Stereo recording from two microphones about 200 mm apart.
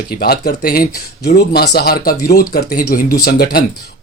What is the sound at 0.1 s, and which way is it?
Speech, 50° left (ahead or behind).